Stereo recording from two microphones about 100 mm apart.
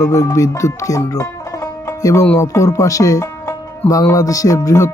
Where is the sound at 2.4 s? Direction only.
30° left (ahead or behind).